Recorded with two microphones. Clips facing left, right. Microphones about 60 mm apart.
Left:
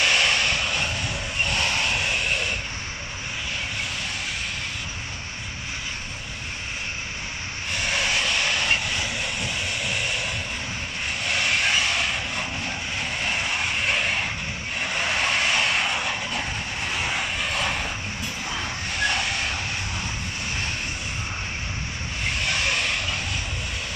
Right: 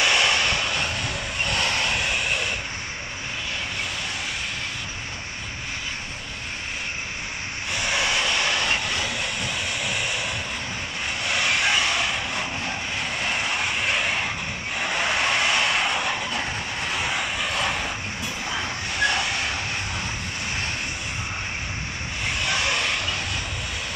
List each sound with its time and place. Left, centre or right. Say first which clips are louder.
0.0 s vehicle: right 1 dB; centre
1.5 s vehicle: right 1 dB; right
1.9 s vehicle: even; centre
7.8 s vehicle: right 1 dB; centre
11.3 s honk: right 1 dB; centre
13.8 s vehicle: even; centre
15.6 s vehicle: right 1 dB; right
18.5 s vehicle: right 2 dB; right